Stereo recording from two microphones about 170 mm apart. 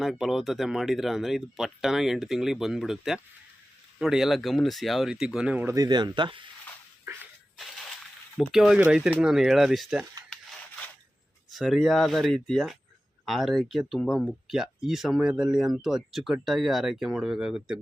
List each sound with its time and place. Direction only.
0.0 s speech: centre (ahead or behind); by 6.4 s 25° right (ahead or behind)
8.4 s speech: centre (ahead or behind)
11.5 s speech: centre (ahead or behind)